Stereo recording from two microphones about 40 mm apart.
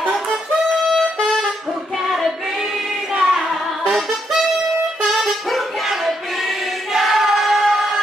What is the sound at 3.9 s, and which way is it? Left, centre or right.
Saxophone, centre.